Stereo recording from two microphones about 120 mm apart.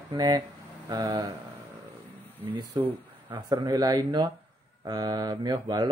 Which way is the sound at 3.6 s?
30° right (ahead or behind).